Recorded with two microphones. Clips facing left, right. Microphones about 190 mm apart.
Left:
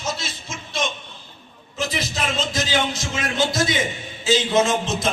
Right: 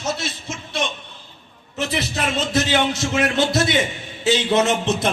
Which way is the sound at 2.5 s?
65° right (ahead or behind).